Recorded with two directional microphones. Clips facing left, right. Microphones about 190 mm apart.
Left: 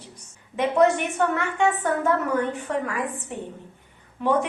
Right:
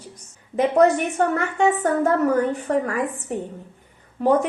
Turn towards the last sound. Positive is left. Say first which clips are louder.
# right 4 dB
turn(degrees=-40)  # may be behind; listen again after turning